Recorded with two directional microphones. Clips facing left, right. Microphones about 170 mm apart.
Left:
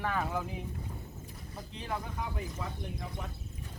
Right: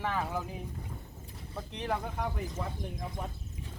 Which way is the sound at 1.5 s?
65° right (ahead or behind).